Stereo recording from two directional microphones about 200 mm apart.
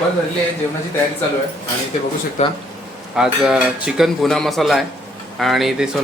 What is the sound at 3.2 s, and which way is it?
Cutlery, centre (ahead or behind).